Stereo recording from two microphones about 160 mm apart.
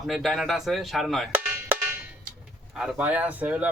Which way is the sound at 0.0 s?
Centre (ahead or behind).